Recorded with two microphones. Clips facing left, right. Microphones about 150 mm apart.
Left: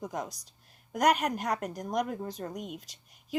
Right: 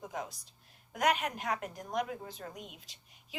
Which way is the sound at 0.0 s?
40° left (ahead or behind).